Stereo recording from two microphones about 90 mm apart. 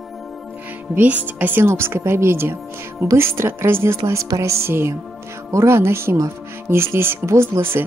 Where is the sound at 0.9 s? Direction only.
20° right (ahead or behind).